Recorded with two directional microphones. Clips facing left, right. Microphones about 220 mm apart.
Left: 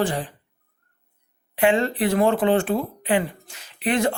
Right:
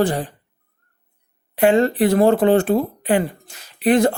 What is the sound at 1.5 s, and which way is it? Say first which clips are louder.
Speech: right 5 dB; 40° right (ahead or behind).